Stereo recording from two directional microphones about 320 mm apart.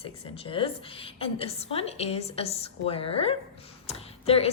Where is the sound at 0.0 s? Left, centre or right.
Centre.